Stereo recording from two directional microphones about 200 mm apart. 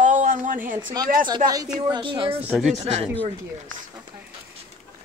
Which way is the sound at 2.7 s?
30° right (ahead or behind).